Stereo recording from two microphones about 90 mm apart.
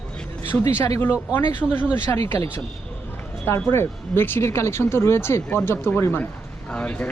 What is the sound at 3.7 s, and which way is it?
Speech, 25° left (ahead or behind).